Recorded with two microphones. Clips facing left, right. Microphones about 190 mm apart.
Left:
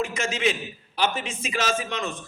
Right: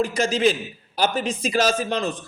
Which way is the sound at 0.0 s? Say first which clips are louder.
Right 6 dB; 35° right (ahead or behind).